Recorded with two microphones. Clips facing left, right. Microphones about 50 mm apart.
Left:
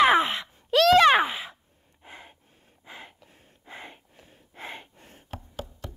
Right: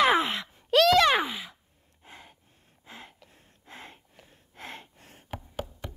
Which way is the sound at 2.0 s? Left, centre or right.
Left.